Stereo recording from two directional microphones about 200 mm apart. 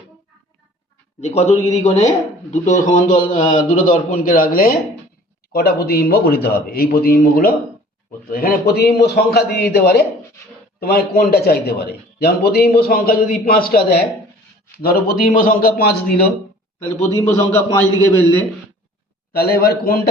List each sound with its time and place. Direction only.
1.2 s a man's voice: 35° left (ahead or behind); by 16.0 s 50° left (ahead or behind)
17.2 s a man's voice: 15° left (ahead or behind)
19.3 s a man's voice: 50° left (ahead or behind)